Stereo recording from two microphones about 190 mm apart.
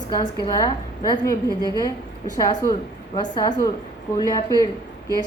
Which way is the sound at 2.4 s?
20° left (ahead or behind).